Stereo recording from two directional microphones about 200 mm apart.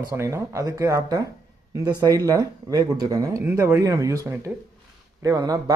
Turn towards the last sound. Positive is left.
turn(degrees=-20)  # may be behind; listen again after turning